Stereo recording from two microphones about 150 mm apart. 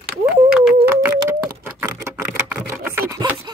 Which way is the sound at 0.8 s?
15° right (ahead or behind).